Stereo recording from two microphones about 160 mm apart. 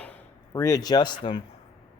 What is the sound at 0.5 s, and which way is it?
Speech, 20° left (ahead or behind).